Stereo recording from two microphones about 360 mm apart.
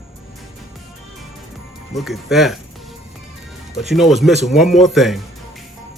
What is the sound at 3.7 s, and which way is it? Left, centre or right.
Speech, centre.